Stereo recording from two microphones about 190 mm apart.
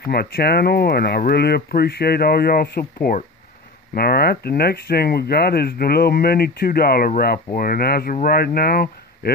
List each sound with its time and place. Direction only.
0.0 s speech: 55° left (ahead or behind)